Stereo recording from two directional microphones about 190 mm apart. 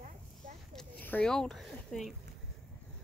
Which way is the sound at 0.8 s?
10° left (ahead or behind).